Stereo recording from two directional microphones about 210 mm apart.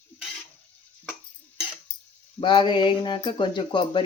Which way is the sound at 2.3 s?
20° left (ahead or behind).